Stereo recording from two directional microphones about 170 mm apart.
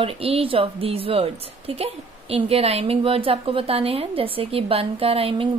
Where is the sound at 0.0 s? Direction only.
35° right (ahead or behind).